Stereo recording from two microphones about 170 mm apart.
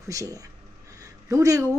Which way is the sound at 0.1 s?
20° right (ahead or behind).